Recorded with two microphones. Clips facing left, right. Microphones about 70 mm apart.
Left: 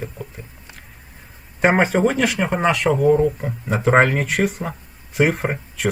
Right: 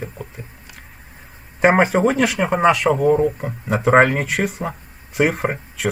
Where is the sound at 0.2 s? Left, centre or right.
Centre.